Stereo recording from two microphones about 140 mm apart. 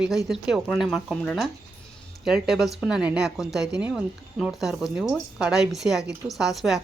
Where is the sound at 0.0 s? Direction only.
Centre (ahead or behind).